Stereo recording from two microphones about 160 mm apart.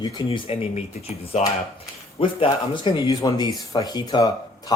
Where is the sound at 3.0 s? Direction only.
20° left (ahead or behind).